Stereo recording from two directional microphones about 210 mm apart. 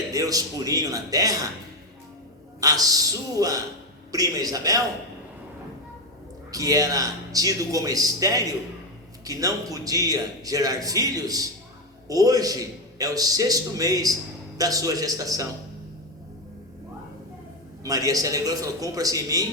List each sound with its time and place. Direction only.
0.1 s a man's voice: 15° right (ahead or behind)
2.6 s a man's voice: 15° right (ahead or behind)
6.5 s a man's voice: 15° right (ahead or behind)
17.8 s a man's voice: 15° right (ahead or behind)